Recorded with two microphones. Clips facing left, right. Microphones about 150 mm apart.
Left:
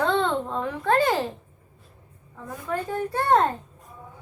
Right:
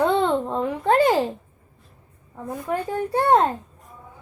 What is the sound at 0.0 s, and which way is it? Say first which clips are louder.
Babbling: right 3 dB; 15° right (ahead or behind).